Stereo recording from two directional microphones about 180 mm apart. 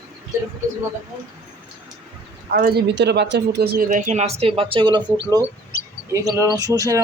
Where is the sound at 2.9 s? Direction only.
70° right (ahead or behind); by 5.0 s 25° right (ahead or behind).